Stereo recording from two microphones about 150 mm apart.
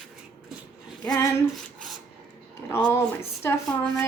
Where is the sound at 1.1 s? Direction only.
20° left (ahead or behind).